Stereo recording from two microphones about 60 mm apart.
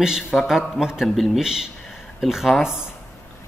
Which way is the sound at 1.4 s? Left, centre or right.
Centre.